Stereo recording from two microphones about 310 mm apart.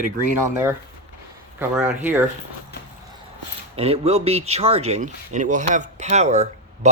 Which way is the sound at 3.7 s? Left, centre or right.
Centre.